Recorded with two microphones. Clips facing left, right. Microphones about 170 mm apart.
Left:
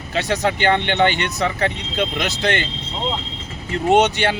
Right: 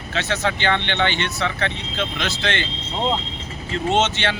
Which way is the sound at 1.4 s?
40° left (ahead or behind).